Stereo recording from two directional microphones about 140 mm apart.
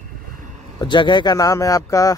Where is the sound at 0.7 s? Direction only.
35° left (ahead or behind).